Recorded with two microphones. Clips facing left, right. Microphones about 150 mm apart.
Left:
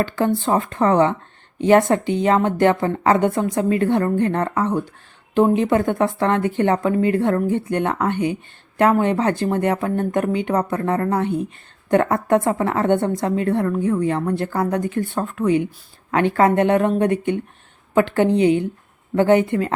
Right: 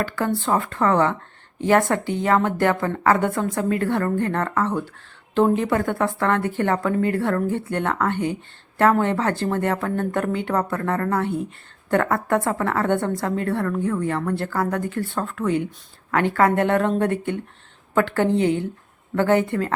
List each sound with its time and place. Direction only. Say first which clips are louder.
0.0 s a woman's voice: left 4 dB; 20° left (ahead or behind)